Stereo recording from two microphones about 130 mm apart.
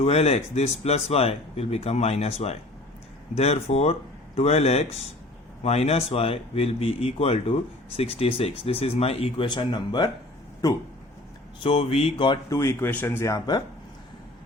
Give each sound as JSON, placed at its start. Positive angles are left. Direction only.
{"t": 0.0, "sound": "speech", "side_deg": 55}
{"t": 11.6, "sound": "speech", "side_deg": 45}
{"t": 12.5, "sound": "speech", "side_deg": 20}